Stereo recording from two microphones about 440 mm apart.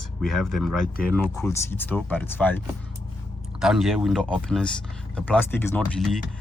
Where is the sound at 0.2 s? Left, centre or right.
Centre.